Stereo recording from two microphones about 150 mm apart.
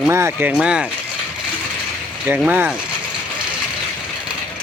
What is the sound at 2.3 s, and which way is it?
Speech, 10° right (ahead or behind).